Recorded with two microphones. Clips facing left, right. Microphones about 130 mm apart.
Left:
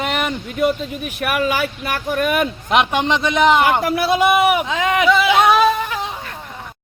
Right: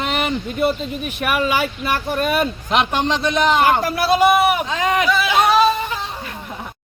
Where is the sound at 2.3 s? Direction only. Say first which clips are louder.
Left 2 dB; 15° left (ahead or behind).